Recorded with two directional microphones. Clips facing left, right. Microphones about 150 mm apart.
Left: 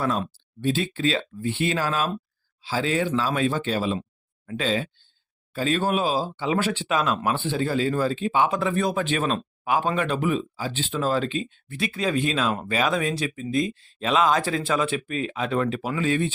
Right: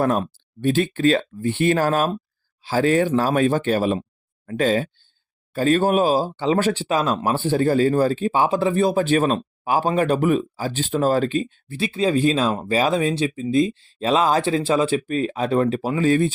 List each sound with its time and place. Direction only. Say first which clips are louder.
0.0 s speech: right 5 dB; 50° right (ahead or behind)